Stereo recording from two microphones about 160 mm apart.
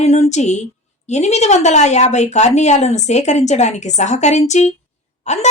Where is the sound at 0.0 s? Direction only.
45° left (ahead or behind).